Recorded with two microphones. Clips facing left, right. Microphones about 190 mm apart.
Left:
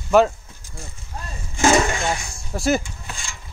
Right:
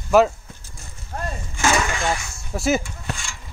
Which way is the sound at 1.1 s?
55° right (ahead or behind).